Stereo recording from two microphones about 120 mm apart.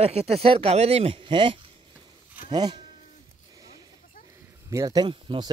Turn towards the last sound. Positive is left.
turn(degrees=-40)  # may be behind; listen again after turning